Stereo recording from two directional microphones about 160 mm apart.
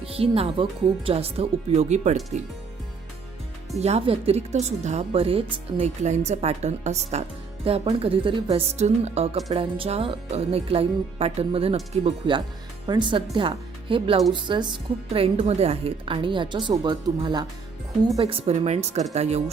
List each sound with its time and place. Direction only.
0.0 s speech: 35° right (ahead or behind)
3.8 s speech: 40° right (ahead or behind)